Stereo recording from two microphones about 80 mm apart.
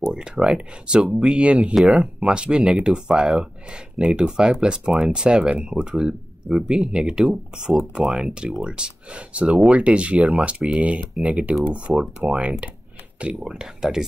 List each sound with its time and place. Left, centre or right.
0.1 s speech: centre